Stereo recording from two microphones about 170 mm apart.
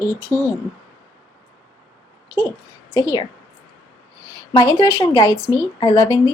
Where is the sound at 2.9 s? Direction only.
25° left (ahead or behind).